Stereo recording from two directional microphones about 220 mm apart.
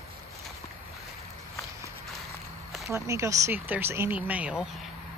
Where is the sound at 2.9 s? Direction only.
15° right (ahead or behind).